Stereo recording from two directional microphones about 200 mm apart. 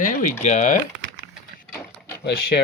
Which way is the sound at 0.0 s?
40° left (ahead or behind).